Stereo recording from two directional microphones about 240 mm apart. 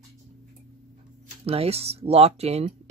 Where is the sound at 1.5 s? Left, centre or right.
Right.